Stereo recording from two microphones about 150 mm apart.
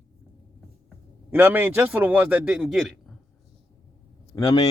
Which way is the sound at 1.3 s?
10° right (ahead or behind).